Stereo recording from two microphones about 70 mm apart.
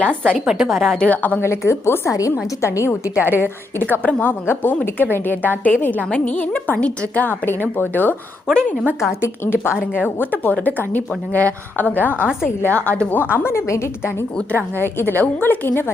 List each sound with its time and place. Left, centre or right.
0.3 s a woman's voice: centre
0.9 s a woman's voice: centre
1.4 s a woman's voice: left
3.2 s a woman's voice: right
3.9 s a woman's voice: left
8.5 s a woman's voice: centre
9.0 s a woman's voice: left